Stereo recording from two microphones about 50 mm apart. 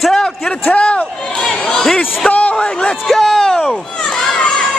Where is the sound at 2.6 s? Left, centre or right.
Centre.